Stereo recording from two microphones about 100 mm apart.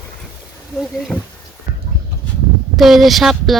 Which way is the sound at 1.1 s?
20° left (ahead or behind).